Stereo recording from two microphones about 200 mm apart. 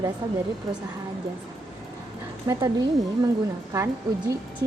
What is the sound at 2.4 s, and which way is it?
Speech, 20° right (ahead or behind).